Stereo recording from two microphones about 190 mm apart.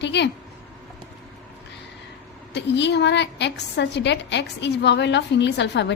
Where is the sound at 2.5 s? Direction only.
65° left (ahead or behind).